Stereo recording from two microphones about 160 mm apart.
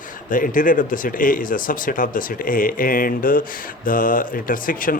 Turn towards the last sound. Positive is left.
turn(degrees=60)  # may be behind; listen again after turning